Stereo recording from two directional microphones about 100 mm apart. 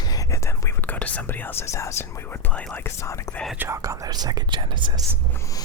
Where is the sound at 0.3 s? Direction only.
25° left (ahead or behind).